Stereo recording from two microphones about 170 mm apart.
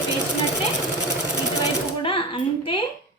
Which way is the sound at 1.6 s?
30° left (ahead or behind).